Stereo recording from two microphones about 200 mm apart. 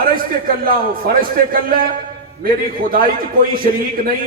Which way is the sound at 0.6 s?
45° right (ahead or behind).